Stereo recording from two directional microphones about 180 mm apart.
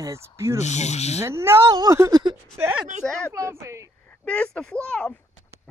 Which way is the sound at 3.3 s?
15° right (ahead or behind).